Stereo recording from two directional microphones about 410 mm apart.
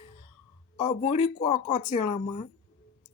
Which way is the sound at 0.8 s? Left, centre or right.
Centre.